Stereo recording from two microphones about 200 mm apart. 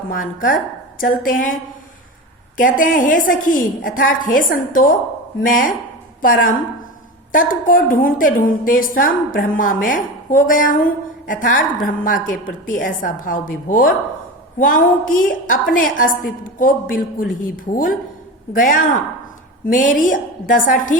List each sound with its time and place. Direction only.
0.1 s a woman's voice: 40° left (ahead or behind)
2.6 s a woman's voice: 40° left (ahead or behind)